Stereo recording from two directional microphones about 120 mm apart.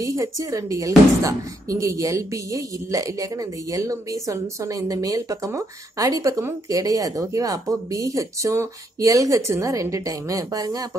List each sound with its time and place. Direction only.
0.0 s speech: 30° right (ahead or behind)